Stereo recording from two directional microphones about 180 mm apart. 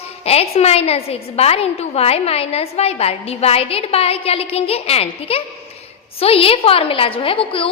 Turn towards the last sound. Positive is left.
turn(degrees=30)  # may be behind; listen again after turning